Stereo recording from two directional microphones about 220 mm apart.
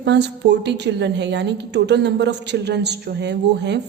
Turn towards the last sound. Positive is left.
turn(degrees=-50)  # may be behind; listen again after turning